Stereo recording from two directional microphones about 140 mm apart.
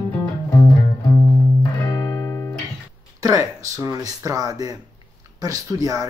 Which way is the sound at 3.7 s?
25° right (ahead or behind).